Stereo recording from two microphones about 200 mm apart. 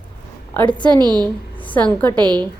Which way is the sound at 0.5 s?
10° left (ahead or behind).